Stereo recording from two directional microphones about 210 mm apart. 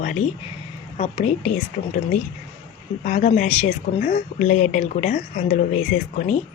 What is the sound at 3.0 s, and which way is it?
Speech, 35° left (ahead or behind).